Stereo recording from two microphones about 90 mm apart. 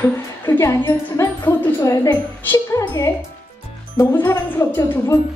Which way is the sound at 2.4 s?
25° left (ahead or behind).